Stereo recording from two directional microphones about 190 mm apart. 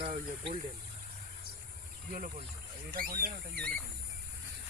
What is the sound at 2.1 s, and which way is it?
Speech, 45° right (ahead or behind).